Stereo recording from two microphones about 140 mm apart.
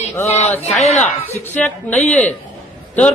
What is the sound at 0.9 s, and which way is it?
Speech, 50° left (ahead or behind).